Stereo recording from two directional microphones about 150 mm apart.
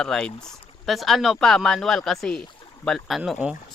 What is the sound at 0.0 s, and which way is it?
Speech, 5° left (ahead or behind).